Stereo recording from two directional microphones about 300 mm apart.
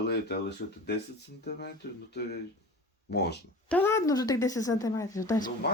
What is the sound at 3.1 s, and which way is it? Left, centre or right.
Speech, left.